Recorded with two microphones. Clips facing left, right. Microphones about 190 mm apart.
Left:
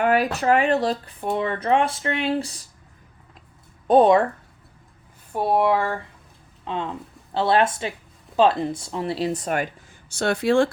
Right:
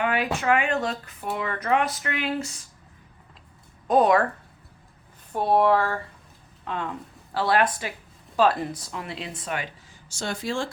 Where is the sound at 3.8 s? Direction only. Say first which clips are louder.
Left 4 dB; 30° left (ahead or behind).